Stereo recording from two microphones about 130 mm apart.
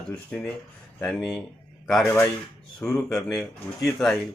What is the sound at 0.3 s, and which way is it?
Speech, 10° left (ahead or behind).